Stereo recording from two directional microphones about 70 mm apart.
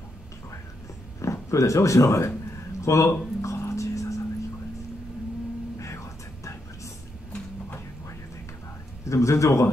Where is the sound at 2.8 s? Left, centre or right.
Left.